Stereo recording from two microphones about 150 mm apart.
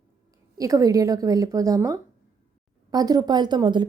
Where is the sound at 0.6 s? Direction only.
20° right (ahead or behind).